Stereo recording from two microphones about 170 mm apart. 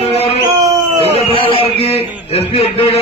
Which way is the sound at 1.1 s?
35° left (ahead or behind).